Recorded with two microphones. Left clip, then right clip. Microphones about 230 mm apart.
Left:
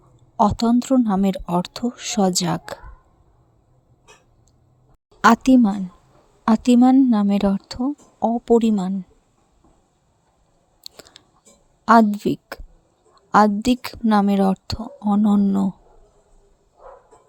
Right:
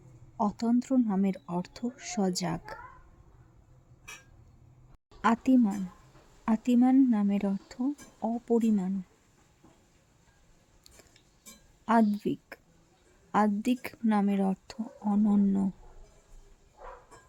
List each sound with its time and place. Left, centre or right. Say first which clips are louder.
0.3 s speech: left 12 dB; left
5.2 s speech: left 11 dB; left
10.8 s a sound: left 17 dB; left
11.9 s speech: left 12 dB; left